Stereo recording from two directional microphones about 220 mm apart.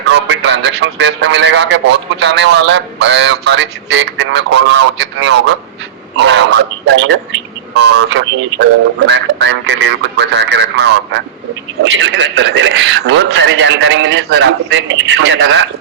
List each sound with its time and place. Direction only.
0.1 s a man's voice: 55° right (ahead or behind)